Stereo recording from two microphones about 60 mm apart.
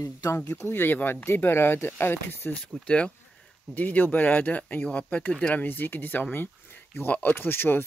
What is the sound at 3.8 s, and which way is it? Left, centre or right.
Speech, left.